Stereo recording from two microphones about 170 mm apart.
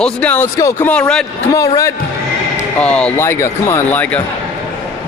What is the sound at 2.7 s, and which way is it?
Speech, 5° left (ahead or behind).